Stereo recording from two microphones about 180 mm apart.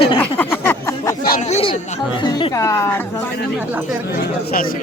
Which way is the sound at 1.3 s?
40° left (ahead or behind).